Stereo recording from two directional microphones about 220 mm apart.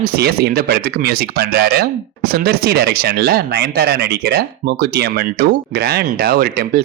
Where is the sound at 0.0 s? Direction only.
45° right (ahead or behind).